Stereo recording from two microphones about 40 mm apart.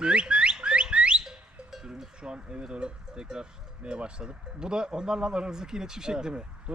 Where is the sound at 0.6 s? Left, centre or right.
Right.